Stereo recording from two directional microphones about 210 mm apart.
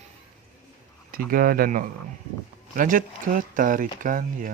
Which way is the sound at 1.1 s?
45° right (ahead or behind).